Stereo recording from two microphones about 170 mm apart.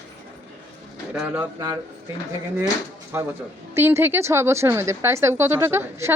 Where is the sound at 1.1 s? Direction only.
10° right (ahead or behind).